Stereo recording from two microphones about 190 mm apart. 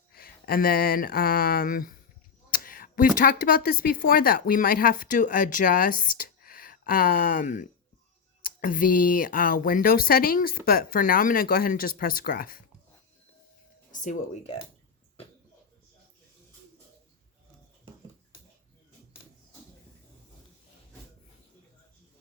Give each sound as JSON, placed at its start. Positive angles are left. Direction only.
{"t": 0.1, "sound": "speech", "side_deg": 50}
{"t": 13.9, "sound": "speech", "side_deg": 40}